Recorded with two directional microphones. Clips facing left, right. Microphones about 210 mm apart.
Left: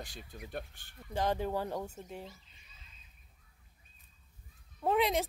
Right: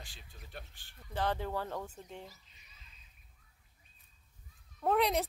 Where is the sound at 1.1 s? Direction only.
15° left (ahead or behind).